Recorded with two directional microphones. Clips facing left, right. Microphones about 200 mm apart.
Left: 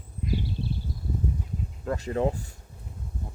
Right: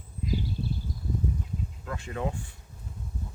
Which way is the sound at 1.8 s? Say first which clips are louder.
Left 8 dB; 35° left (ahead or behind).